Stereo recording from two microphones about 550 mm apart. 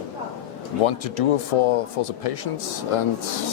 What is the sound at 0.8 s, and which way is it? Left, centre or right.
Speech, left.